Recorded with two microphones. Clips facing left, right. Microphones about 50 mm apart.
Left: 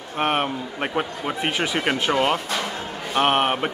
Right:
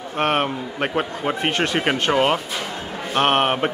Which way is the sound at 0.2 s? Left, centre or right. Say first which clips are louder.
Right 2 dB; centre.